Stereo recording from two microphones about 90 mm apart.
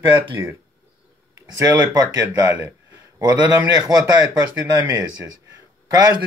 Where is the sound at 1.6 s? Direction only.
45° right (ahead or behind).